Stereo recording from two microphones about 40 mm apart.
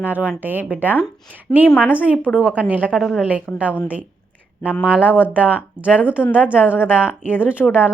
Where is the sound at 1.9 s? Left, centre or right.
Right.